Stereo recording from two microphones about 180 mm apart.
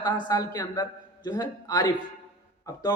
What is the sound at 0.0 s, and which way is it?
A man's voice, 20° left (ahead or behind).